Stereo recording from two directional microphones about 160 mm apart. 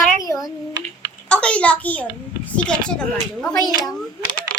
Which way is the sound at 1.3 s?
5° left (ahead or behind).